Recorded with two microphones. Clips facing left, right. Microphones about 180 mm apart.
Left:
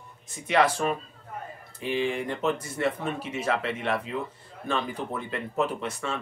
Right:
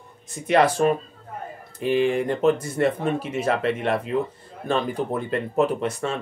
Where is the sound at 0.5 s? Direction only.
45° right (ahead or behind).